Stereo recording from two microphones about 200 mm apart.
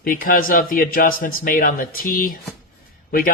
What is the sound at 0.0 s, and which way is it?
Speech, 45° left (ahead or behind).